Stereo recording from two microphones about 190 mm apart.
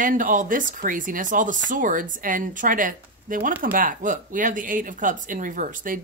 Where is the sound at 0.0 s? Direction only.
45° right (ahead or behind).